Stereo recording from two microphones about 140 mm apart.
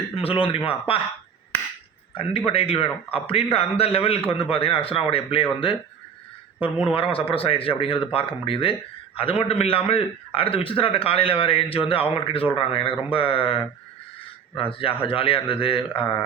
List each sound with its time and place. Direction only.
0.2 s a man's voice: 40° left (ahead or behind)
2.5 s a man's voice: 45° left (ahead or behind)
6.9 s a man's voice: 40° left (ahead or behind)